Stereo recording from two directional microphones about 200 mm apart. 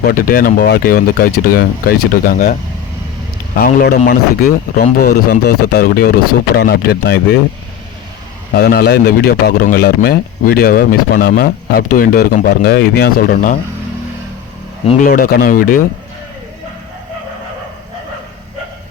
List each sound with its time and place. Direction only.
0.0 s a man's voice: 45° left (ahead or behind)
8.5 s a man's voice: 50° left (ahead or behind)
15.0 s a man's voice: 45° left (ahead or behind)